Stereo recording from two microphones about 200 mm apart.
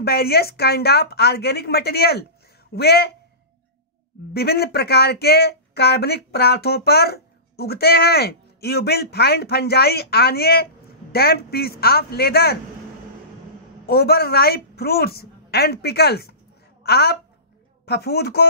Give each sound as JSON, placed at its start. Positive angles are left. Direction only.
{"t": 0.0, "sound": "speech", "side_deg": 50}
{"t": 4.3, "sound": "speech", "side_deg": 50}
{"t": 13.8, "sound": "speech", "side_deg": 50}